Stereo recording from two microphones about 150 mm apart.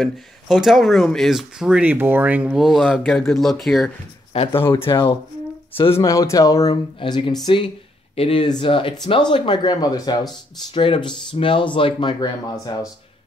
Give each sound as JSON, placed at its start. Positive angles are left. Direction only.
{"t": 0.0, "sound": "speech", "side_deg": 0}
{"t": 4.3, "sound": "speech", "side_deg": 45}
{"t": 4.6, "sound": "speech", "side_deg": 15}
{"t": 5.9, "sound": "speech", "side_deg": 20}
{"t": 7.0, "sound": "speech", "side_deg": 35}